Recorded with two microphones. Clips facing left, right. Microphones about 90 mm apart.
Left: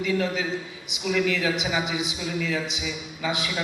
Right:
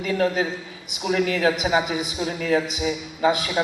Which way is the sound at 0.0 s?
45° right (ahead or behind).